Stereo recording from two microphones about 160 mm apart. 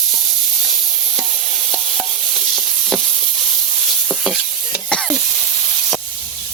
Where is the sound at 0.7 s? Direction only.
Centre (ahead or behind).